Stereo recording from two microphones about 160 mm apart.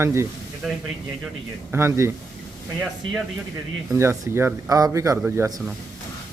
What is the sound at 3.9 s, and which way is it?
Speech, 20° right (ahead or behind).